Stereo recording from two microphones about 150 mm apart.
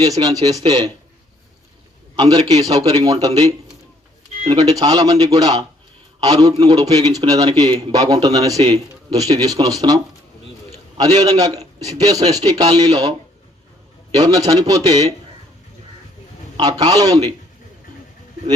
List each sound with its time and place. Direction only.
0.0 s a man's voice: 25° right (ahead or behind)
2.1 s a man's voice: 25° right (ahead or behind)
4.5 s a man's voice: 25° right (ahead or behind)
14.2 s a man's voice: 25° right (ahead or behind)
16.6 s a man's voice: 25° right (ahead or behind)